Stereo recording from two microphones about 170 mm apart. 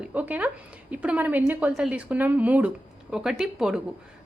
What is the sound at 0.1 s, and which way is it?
A woman's voice, 10° right (ahead or behind).